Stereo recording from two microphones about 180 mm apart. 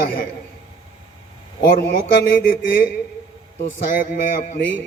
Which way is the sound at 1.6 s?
60° left (ahead or behind).